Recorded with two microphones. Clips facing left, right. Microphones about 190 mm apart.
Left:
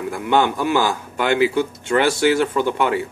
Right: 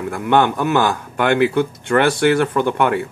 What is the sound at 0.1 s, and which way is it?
A man's voice, 60° right (ahead or behind).